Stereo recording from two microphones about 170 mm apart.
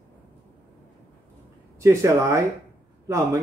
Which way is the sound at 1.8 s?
20° right (ahead or behind).